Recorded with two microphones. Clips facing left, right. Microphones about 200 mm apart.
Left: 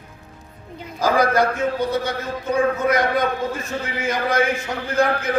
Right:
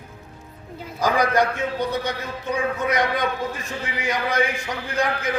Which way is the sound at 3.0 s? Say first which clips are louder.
Left 3 dB; 50° left (ahead or behind).